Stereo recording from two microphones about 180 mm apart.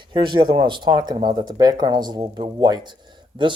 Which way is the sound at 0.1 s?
25° right (ahead or behind).